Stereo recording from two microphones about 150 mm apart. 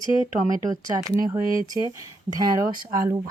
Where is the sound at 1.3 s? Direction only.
25° right (ahead or behind).